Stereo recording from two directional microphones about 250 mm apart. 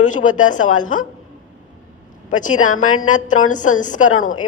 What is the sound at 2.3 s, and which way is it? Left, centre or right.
A woman's voice, left.